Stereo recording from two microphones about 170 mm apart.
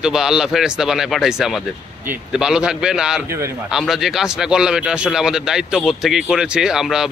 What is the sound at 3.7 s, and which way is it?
A man's voice, centre (ahead or behind).